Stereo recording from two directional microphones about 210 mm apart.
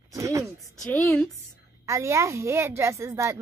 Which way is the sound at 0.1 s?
15° right (ahead or behind).